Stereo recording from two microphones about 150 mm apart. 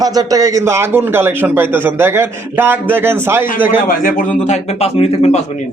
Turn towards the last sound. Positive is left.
turn(degrees=45)  # may be behind; listen again after turning